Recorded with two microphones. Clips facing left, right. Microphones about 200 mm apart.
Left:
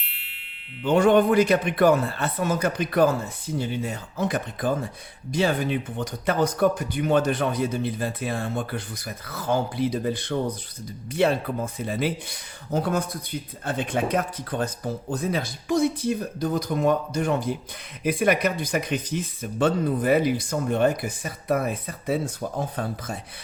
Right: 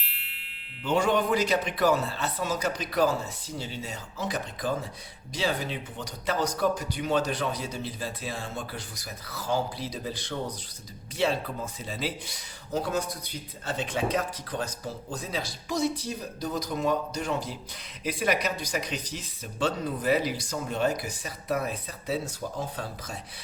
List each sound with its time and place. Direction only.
0.0 s music: centre (ahead or behind)
0.9 s speech: 55° left (ahead or behind)